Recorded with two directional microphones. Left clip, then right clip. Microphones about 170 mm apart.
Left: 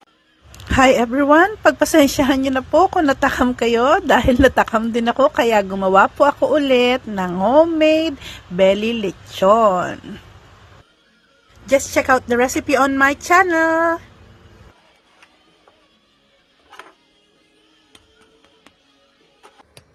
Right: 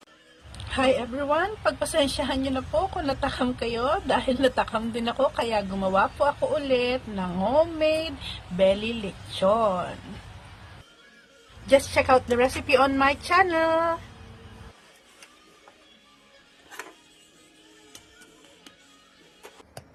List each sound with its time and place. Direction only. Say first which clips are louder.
0.5 s a woman's voice: left 10 dB; 50° left (ahead or behind)
7.3 s speech: left 9 dB; 35° left (ahead or behind)
11.7 s a woman's voice: left 4 dB; 25° left (ahead or behind)